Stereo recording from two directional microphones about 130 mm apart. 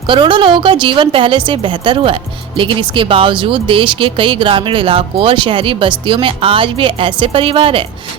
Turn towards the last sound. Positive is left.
turn(degrees=-45)  # may be behind; listen again after turning